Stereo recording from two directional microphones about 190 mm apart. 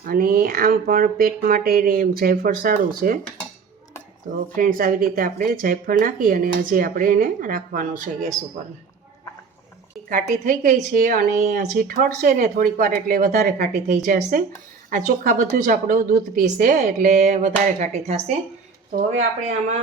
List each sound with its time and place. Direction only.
0.0 s speech: 50° right (ahead or behind)
4.5 s speech: 45° right (ahead or behind)
10.1 s speech: 40° right (ahead or behind)
19.5 s speech: 35° right (ahead or behind)